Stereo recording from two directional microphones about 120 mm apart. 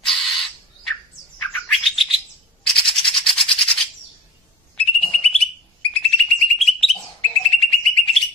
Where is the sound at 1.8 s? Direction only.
Centre (ahead or behind).